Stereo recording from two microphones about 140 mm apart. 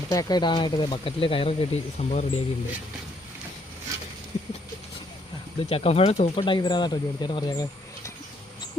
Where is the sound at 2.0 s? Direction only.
50° left (ahead or behind).